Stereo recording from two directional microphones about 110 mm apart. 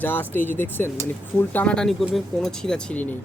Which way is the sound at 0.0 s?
15° left (ahead or behind).